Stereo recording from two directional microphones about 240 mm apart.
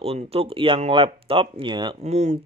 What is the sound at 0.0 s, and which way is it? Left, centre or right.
Speech, right.